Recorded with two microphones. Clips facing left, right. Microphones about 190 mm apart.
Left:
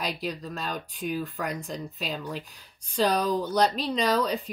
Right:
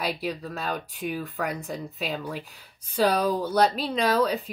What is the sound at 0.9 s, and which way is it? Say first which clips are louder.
Speech: even; 60° right (ahead or behind).